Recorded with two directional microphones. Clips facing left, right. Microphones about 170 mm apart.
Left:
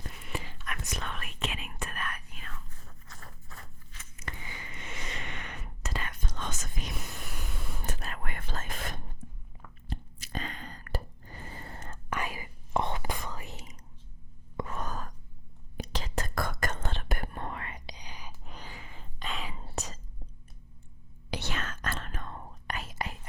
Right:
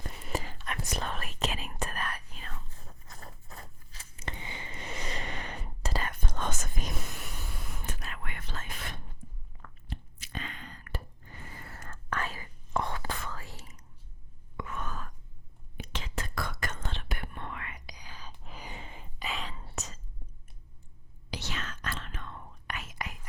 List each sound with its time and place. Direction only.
0.2 s whispering: 40° right (ahead or behind)
6.1 s whispering: 50° right (ahead or behind)
8.0 s whispering: 40° left (ahead or behind)
9.9 s squish: 40° left (ahead or behind)
12.1 s whispering: 15° left (ahead or behind)
14.5 s sigh: 35° left (ahead or behind)
15.8 s whispering: 40° left (ahead or behind); by 18.3 s 15° left (ahead or behind)
18.6 s a sound: 20° right (ahead or behind)
19.2 s whispering: centre (ahead or behind)
19.6 s whispering: 35° left (ahead or behind)
21.2 s whispering: 55° left (ahead or behind); by 23.1 s 30° left (ahead or behind)